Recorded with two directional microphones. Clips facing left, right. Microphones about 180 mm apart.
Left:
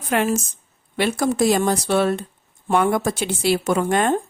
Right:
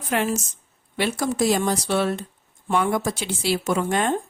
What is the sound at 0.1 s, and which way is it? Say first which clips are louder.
Speech: left 3 dB; 55° left (ahead or behind).